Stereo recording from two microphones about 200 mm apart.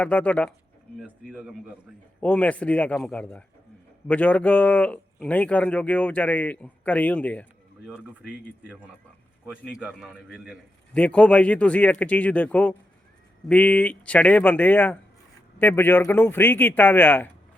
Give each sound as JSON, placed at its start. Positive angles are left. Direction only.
{"t": 0.0, "sound": "a man's voice", "side_deg": 5}
{"t": 7.9, "sound": "a man's voice", "side_deg": -5}